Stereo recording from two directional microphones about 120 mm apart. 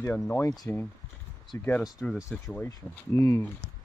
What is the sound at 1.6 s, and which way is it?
Speech, 15° left (ahead or behind).